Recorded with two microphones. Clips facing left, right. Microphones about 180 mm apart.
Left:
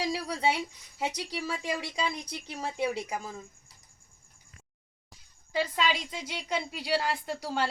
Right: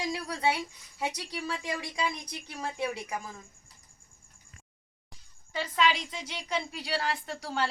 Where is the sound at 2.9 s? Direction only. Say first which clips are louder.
Left 2 dB; 30° left (ahead or behind).